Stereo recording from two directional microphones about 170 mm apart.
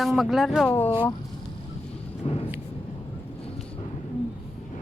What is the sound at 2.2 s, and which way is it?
Vehicle, 35° left (ahead or behind).